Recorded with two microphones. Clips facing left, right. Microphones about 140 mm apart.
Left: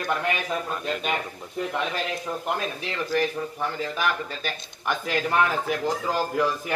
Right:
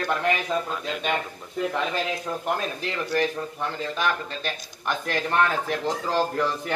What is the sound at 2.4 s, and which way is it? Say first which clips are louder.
Speech: right 3 dB; centre (ahead or behind).